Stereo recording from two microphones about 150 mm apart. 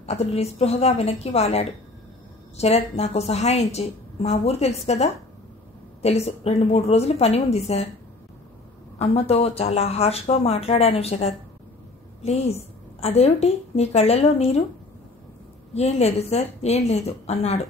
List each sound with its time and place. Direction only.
0.0 s a woman's voice: 45° left (ahead or behind)
8.9 s a woman's voice: 40° left (ahead or behind)
15.7 s a woman's voice: 45° left (ahead or behind)